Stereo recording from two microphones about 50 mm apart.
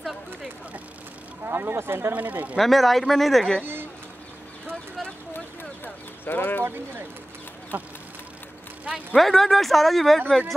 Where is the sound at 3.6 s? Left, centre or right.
Right.